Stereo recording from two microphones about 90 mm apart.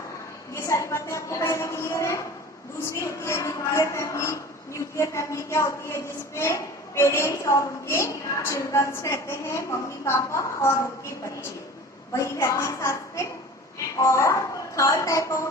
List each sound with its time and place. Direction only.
0.5 s a sound: 35° left (ahead or behind)
2.9 s a woman's voice: 30° left (ahead or behind)
12.1 s a woman's voice: 30° left (ahead or behind)